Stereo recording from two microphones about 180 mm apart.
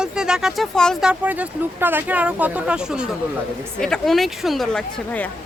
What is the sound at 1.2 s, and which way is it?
A woman's voice, 10° right (ahead or behind).